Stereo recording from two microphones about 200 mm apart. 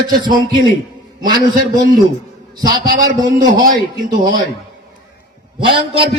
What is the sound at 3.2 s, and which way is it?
Speech, 20° right (ahead or behind).